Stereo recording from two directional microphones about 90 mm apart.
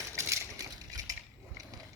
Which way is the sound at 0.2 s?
35° right (ahead or behind).